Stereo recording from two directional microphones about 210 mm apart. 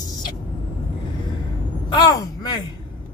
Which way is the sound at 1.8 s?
20° left (ahead or behind).